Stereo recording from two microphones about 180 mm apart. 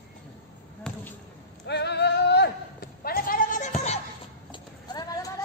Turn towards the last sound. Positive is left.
turn(degrees=20)  # may be behind; listen again after turning